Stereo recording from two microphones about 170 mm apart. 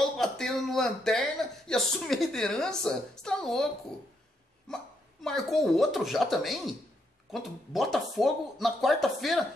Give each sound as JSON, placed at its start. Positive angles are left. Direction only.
{"t": 0.0, "sound": "speech", "side_deg": 5}
{"t": 5.2, "sound": "speech", "side_deg": 0}